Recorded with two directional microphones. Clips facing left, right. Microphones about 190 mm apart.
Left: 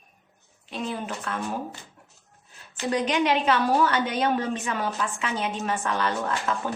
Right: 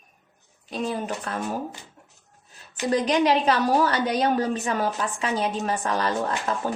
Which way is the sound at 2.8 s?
35° right (ahead or behind).